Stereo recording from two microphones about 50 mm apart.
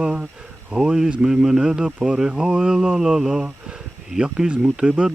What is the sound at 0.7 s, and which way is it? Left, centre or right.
Speech, centre.